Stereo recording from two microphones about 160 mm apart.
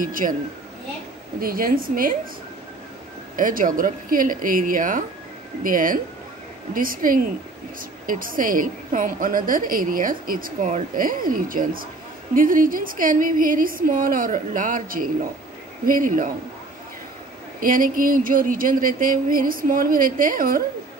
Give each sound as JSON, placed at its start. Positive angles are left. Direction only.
{"t": 0.0, "sound": "a woman's voice", "side_deg": -60}
{"t": 1.4, "sound": "a woman's voice", "side_deg": -65}
{"t": 3.3, "sound": "a woman's voice", "side_deg": -60}
{"t": 17.6, "sound": "a woman's voice", "side_deg": -60}